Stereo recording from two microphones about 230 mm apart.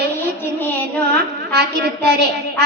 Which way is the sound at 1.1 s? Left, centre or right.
Right.